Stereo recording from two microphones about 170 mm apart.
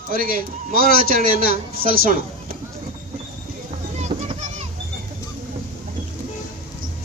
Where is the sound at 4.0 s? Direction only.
40° right (ahead or behind).